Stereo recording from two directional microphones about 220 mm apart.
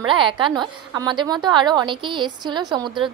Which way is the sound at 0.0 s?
20° right (ahead or behind).